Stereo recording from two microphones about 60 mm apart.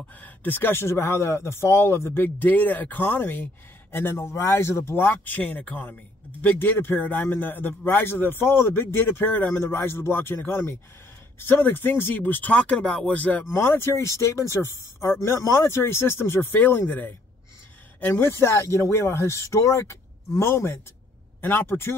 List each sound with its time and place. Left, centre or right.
0.2 s a man's voice: left
13.5 s speech: left
15.4 s speech: left
18.0 s speech: left